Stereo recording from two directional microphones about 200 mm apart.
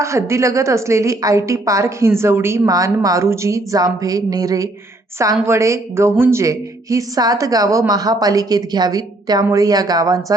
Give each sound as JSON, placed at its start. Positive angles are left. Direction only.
{"t": 0.0, "sound": "a woman's voice", "side_deg": -15}